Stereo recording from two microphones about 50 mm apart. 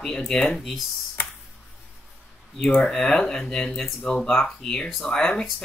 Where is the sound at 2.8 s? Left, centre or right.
Centre.